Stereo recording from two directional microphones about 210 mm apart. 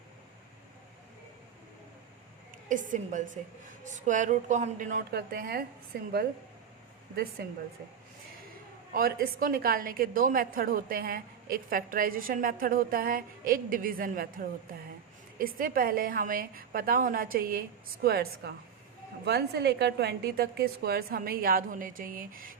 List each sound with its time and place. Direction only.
2.6 s a woman's voice: 40° right (ahead or behind)
7.4 s a woman's voice: 50° right (ahead or behind)
8.9 s a woman's voice: 45° right (ahead or behind)